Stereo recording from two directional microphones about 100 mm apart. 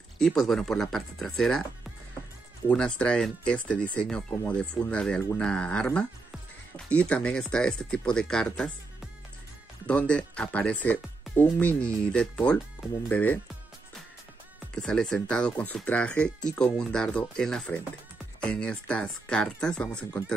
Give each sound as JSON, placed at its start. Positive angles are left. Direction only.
{"t": 0.2, "sound": "speech", "side_deg": 5}
{"t": 2.7, "sound": "speech", "side_deg": 10}
{"t": 9.8, "sound": "speech", "side_deg": 10}
{"t": 14.8, "sound": "speech", "side_deg": 5}